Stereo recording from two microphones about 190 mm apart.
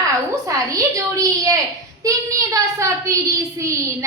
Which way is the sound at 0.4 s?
15° right (ahead or behind).